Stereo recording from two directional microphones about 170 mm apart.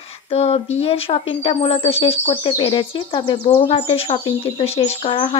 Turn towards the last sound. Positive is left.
turn(degrees=35)  # may be behind; listen again after turning